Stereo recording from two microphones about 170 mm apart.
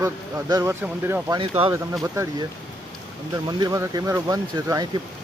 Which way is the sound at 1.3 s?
30° right (ahead or behind).